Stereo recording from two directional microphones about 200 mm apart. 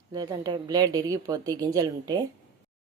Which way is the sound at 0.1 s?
20° right (ahead or behind).